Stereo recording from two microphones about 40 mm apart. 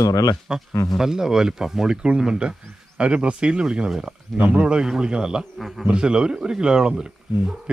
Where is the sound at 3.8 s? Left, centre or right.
Centre.